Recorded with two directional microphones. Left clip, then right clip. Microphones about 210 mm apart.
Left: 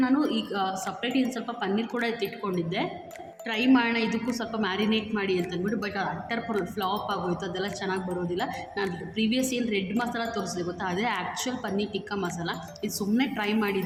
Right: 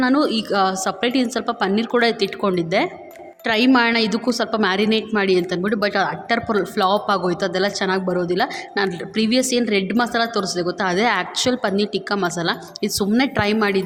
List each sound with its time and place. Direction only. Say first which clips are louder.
0.0 s a woman's voice: right 8 dB; 45° right (ahead or behind)